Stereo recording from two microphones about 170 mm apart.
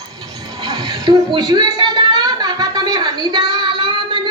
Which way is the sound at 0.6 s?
25° right (ahead or behind).